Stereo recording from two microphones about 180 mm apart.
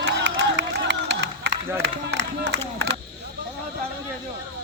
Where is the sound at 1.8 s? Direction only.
70° right (ahead or behind).